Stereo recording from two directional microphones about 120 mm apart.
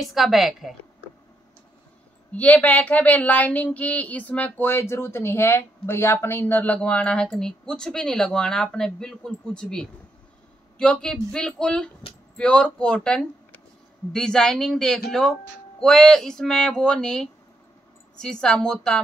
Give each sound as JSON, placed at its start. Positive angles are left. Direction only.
{"t": 0.0, "sound": "speech", "side_deg": 0}
{"t": 2.3, "sound": "speech", "side_deg": 15}